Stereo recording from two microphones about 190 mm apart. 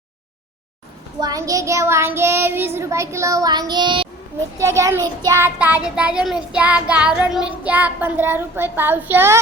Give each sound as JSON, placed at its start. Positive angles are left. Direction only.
{"t": 1.2, "sound": "child singing", "side_deg": -20}
{"t": 4.5, "sound": "child singing", "side_deg": -15}